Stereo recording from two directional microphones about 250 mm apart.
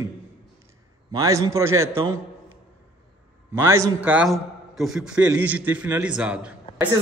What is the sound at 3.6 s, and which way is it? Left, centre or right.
A man's voice, centre.